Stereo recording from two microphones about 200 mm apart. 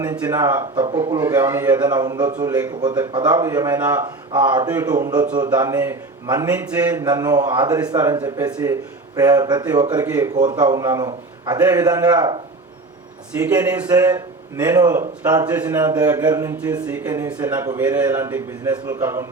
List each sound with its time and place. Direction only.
0.0 s a man's voice: 20° right (ahead or behind)
13.4 s a man's voice: 20° right (ahead or behind)